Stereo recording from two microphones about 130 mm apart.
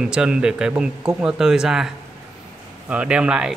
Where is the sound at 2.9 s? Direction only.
10° right (ahead or behind).